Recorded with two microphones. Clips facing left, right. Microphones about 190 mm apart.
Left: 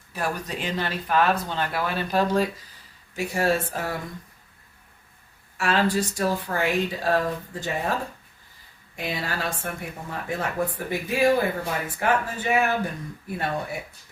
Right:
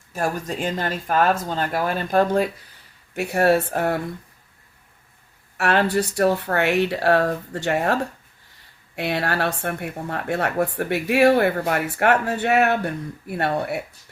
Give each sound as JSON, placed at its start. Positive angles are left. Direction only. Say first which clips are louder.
{"t": 0.1, "sound": "speech", "louder": "right 4 dB", "side_deg": -45}
{"t": 3.2, "sound": "speech", "louder": "right 5 dB", "side_deg": -65}
{"t": 5.5, "sound": "speech", "louder": "right 3 dB", "side_deg": -65}
{"t": 9.0, "sound": "speech", "louder": "right 6 dB", "side_deg": -70}